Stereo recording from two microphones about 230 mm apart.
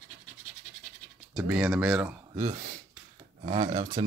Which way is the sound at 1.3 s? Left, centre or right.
Centre.